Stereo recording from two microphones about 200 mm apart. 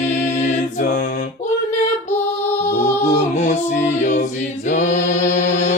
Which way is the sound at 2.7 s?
35° left (ahead or behind).